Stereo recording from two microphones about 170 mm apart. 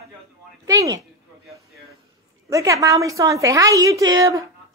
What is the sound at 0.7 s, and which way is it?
Speech, 20° right (ahead or behind).